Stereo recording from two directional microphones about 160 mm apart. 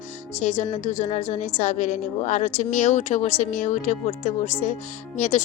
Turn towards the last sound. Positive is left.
turn(degrees=50)  # may be behind; listen again after turning